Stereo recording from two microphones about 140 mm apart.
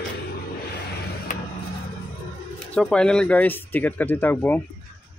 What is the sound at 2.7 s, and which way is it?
Speech, 5° left (ahead or behind).